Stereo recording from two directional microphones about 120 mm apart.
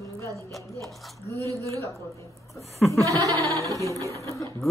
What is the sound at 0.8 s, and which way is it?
Speech, centre (ahead or behind).